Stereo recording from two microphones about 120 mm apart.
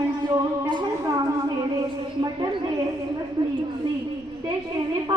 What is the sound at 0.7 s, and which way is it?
Speech, 40° right (ahead or behind).